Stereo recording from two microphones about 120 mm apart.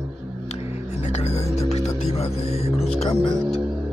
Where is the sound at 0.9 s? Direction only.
65° left (ahead or behind).